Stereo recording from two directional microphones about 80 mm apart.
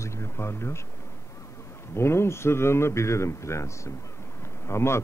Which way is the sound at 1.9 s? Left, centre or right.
Left.